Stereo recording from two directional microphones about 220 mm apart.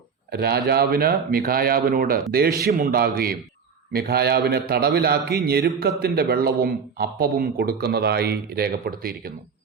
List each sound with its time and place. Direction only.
0.3 s speech: 45° right (ahead or behind)